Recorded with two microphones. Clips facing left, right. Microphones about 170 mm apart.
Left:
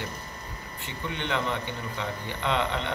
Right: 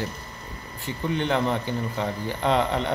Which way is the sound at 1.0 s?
35° right (ahead or behind).